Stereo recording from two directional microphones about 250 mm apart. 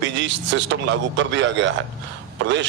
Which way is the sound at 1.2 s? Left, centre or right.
Right.